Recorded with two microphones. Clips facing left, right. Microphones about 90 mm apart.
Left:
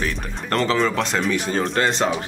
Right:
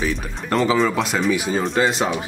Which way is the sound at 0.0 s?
Centre (ahead or behind).